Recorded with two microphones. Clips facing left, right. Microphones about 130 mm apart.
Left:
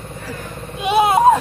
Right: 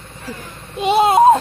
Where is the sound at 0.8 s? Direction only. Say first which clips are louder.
Right 2 dB; 30° right (ahead or behind).